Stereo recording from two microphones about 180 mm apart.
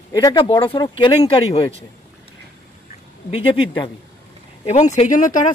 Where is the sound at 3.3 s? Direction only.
30° left (ahead or behind).